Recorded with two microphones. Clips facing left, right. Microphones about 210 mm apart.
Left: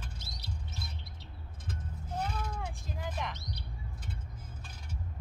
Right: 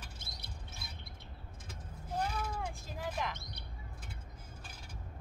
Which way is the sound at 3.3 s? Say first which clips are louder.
Left 6 dB; 50° right (ahead or behind).